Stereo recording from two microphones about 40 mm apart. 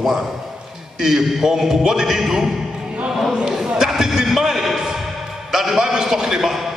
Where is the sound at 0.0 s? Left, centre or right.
Centre.